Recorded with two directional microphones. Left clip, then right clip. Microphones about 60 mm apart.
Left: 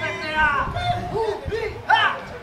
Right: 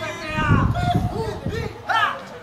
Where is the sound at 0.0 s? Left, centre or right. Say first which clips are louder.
Left 4 dB; centre.